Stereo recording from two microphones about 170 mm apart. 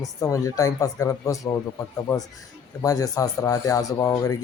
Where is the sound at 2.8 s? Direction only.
20° left (ahead or behind).